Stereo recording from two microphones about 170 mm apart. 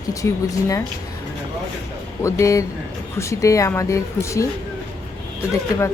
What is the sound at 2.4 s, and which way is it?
Speech, 20° left (ahead or behind).